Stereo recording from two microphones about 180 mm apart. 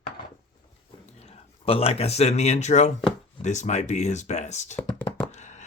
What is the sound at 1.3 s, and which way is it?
Speech, 30° left (ahead or behind).